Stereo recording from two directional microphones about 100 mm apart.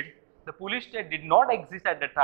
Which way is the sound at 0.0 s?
20° right (ahead or behind).